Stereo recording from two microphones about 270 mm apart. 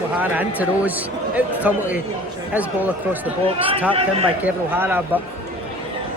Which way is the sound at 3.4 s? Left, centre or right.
Centre.